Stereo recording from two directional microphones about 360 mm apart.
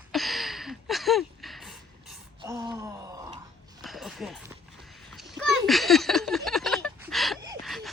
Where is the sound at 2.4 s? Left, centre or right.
Centre.